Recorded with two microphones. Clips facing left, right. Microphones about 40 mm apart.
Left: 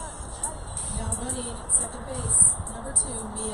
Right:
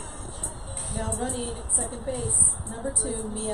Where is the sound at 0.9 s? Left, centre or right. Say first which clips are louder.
Right 4 dB; right.